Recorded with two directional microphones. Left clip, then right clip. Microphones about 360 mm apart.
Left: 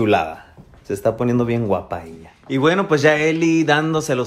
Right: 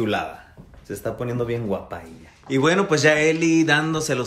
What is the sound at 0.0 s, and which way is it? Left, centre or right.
Speech, centre.